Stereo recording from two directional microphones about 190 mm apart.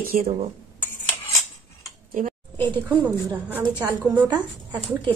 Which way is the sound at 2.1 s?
45° right (ahead or behind).